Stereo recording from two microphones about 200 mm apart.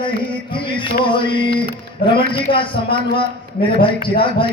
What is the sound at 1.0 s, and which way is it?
A man's voice, 25° left (ahead or behind).